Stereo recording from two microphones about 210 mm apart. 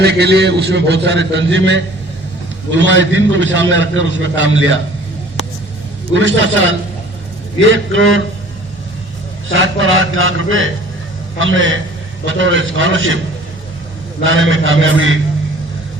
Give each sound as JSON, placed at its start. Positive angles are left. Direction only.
{"t": 0.0, "sound": "a man's voice", "side_deg": -50}
{"t": 6.1, "sound": "a man's voice", "side_deg": -65}
{"t": 9.5, "sound": "a man's voice", "side_deg": -65}
{"t": 14.3, "sound": "a man's voice", "side_deg": -65}